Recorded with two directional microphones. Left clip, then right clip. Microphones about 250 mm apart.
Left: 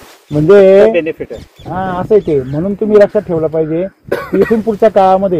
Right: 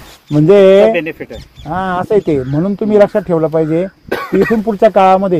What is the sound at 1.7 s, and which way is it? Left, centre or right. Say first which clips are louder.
Speech: left 2 dB; right.